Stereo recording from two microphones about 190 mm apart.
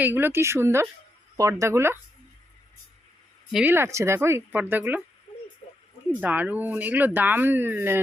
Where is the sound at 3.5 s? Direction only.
10° right (ahead or behind).